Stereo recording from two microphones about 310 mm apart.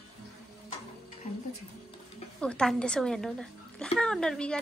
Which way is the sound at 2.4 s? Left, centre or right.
Centre.